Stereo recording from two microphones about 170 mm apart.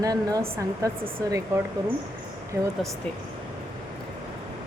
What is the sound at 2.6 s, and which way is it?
Speech, 10° right (ahead or behind).